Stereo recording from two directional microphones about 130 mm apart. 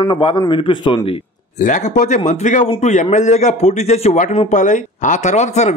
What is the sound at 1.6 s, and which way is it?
A man's voice, 75° left (ahead or behind).